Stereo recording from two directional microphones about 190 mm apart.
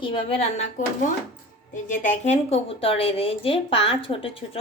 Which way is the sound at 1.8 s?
40° left (ahead or behind).